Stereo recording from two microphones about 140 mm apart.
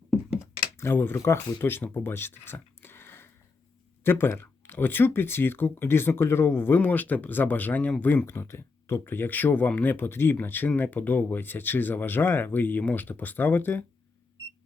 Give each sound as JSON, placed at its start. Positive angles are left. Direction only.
{"t": 0.8, "sound": "speech", "side_deg": 15}